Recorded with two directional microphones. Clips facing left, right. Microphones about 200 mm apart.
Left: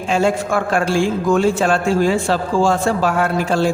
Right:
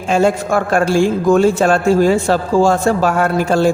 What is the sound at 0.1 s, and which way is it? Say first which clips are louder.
Speech: right 3 dB; 45° right (ahead or behind).